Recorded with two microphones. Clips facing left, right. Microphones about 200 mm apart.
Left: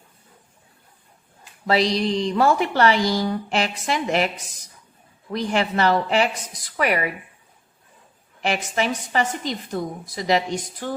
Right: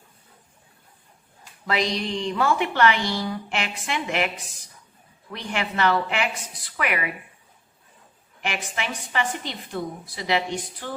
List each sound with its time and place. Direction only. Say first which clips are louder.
1.6 s a woman's voice: left 5 dB; 35° left (ahead or behind)
5.3 s a woman's voice: left 7 dB; 35° left (ahead or behind)
8.4 s a woman's voice: left 7 dB; 40° left (ahead or behind)